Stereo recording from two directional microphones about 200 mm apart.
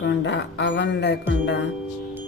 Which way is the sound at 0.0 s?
60° left (ahead or behind).